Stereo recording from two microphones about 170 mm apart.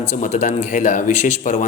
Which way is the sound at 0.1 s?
45° left (ahead or behind).